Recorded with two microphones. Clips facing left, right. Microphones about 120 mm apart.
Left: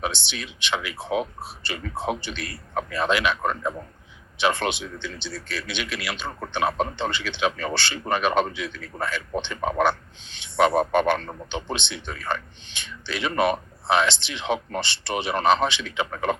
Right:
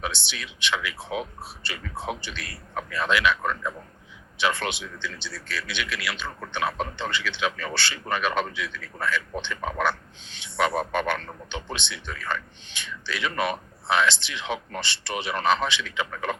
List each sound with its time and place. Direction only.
0.0 s speech: 20° left (ahead or behind)